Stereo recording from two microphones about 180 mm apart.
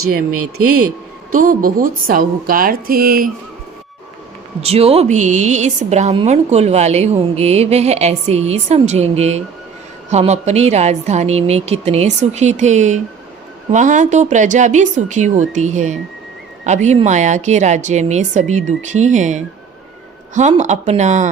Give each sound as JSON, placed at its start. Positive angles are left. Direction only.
{"t": 1.3, "sound": "a woman's voice", "side_deg": -50}
{"t": 4.6, "sound": "a woman's voice", "side_deg": -35}